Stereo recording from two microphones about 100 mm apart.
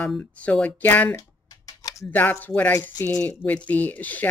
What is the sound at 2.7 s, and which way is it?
Speech, 25° left (ahead or behind).